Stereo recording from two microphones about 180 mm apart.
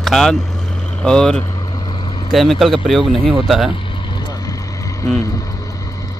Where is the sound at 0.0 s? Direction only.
Centre (ahead or behind).